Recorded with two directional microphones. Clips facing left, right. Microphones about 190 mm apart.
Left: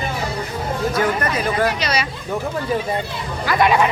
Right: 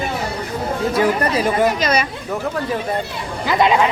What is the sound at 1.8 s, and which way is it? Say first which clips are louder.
Speech: right 4 dB; 50° right (ahead or behind).